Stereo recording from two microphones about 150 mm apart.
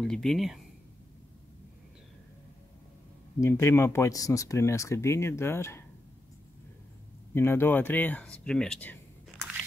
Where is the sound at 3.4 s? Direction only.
15° left (ahead or behind).